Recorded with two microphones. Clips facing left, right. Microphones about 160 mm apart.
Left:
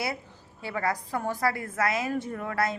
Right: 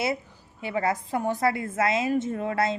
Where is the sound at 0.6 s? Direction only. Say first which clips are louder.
Right 3 dB; 20° right (ahead or behind).